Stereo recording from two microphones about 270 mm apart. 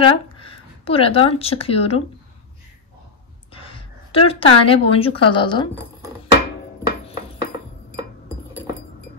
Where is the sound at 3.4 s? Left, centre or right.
Centre.